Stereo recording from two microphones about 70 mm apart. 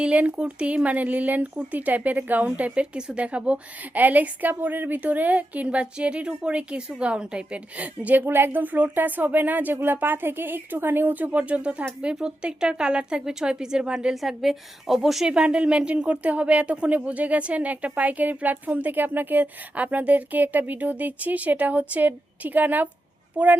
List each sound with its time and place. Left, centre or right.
0.0 s speech: centre